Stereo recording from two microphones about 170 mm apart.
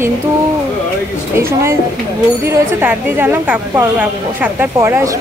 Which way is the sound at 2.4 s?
15° right (ahead or behind).